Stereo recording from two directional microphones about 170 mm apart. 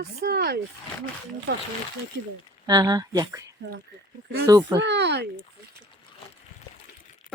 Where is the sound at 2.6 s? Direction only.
25° right (ahead or behind).